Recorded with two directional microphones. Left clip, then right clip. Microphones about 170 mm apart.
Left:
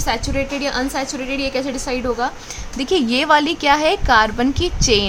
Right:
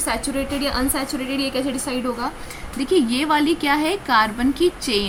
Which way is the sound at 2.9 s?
50° left (ahead or behind).